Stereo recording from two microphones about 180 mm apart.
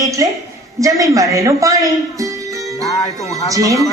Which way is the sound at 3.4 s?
20° right (ahead or behind).